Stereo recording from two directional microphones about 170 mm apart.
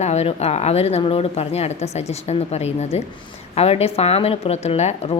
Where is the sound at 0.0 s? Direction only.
40° left (ahead or behind).